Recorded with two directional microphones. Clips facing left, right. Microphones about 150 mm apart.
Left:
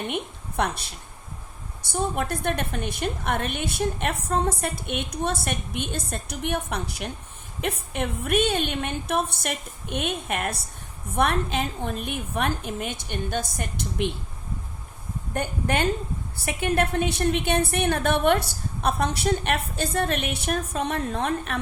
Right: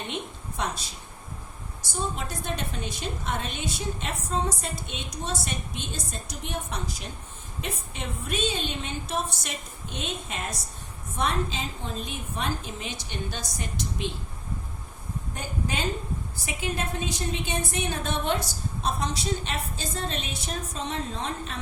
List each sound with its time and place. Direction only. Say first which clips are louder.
0.1 s a sound: left 4 dB; 60° left (ahead or behind)
1.9 s a woman's voice: left 6 dB; 60° left (ahead or behind)
15.3 s a woman's voice: left 7 dB; 60° left (ahead or behind)